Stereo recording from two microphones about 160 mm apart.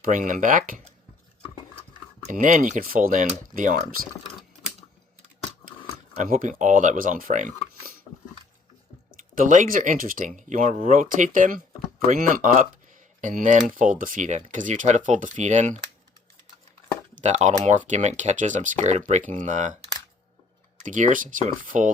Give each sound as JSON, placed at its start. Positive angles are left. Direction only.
{"t": 0.0, "sound": "speech", "side_deg": -55}
{"t": 2.3, "sound": "speech", "side_deg": -55}
{"t": 6.2, "sound": "speech", "side_deg": -55}
{"t": 9.3, "sound": "speech", "side_deg": -55}
{"t": 17.2, "sound": "speech", "side_deg": -45}
{"t": 20.7, "sound": "speech", "side_deg": -50}